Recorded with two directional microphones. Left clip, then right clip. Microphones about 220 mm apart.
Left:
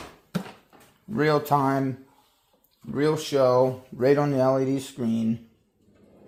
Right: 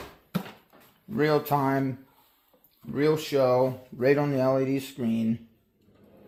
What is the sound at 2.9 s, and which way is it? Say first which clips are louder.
Speech: left 1 dB; 10° left (ahead or behind).